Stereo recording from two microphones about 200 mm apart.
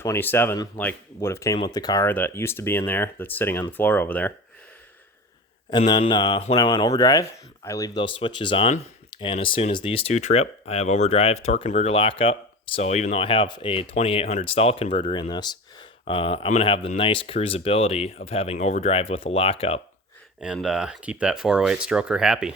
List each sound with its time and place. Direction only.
0.0 s speech: 10° left (ahead or behind)
5.7 s speech: 25° left (ahead or behind)
15.1 s speech: 20° left (ahead or behind)
20.4 s speech: 5° right (ahead or behind)